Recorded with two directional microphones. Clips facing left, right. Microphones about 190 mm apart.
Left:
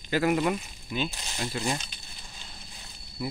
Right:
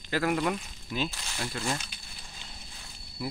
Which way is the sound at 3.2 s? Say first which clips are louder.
Left 2 dB; centre (ahead or behind).